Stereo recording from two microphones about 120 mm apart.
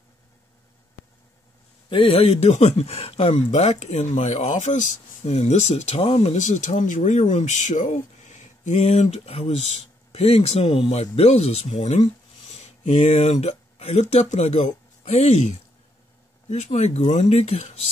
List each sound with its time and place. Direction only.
1.9 s a man's voice: 45° left (ahead or behind)
2.5 s speech: 65° left (ahead or behind)
6.4 s speech: 85° left; by 17.7 s 60° left (ahead or behind)